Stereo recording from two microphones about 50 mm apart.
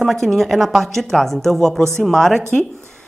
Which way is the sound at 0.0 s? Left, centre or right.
Centre.